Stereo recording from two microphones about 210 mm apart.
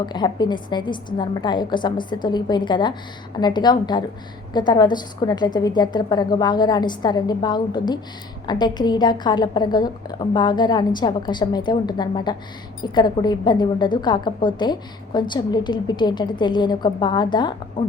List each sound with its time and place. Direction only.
0.0 s a woman's voice: 20° left (ahead or behind)